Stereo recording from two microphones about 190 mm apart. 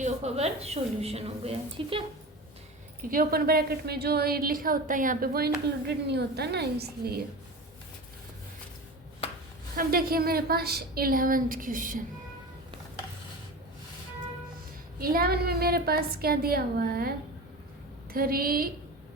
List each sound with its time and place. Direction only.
0.0 s a woman's voice: 35° right (ahead or behind)
3.0 s a woman's voice: 50° right (ahead or behind)
5.9 s a woman's voice: 60° right (ahead or behind)
9.7 s a woman's voice: 50° right (ahead or behind)
14.9 s a woman's voice: 50° right (ahead or behind)